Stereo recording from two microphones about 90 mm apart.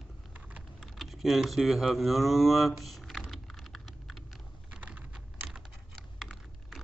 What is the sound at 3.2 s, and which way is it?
Typing, centre (ahead or behind).